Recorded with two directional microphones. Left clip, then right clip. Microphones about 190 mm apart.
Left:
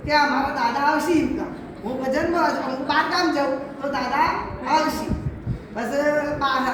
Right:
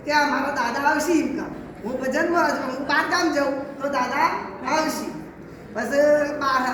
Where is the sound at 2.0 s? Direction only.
15° left (ahead or behind).